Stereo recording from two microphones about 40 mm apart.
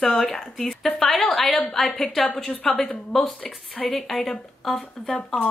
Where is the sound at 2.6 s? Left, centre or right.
Centre.